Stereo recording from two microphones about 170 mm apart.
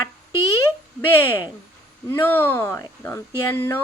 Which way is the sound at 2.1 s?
15° left (ahead or behind).